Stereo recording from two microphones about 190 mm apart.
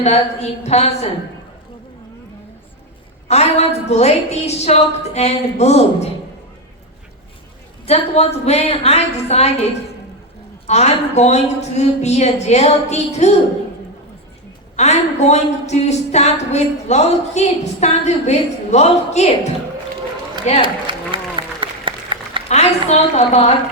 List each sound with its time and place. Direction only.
0.6 s speech: 35° left (ahead or behind)
3.2 s speech: 35° left (ahead or behind)
7.9 s speech: 35° left (ahead or behind)
10.7 s speech: 35° left (ahead or behind)
14.8 s speech: 35° left (ahead or behind)
20.6 s applause: 25° right (ahead or behind)
22.4 s speech: 35° left (ahead or behind)